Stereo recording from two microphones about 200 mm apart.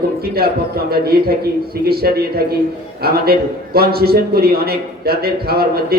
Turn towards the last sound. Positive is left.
turn(degrees=-50)  # may be behind; listen again after turning